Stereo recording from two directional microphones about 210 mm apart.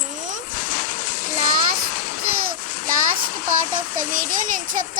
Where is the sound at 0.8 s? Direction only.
40° left (ahead or behind).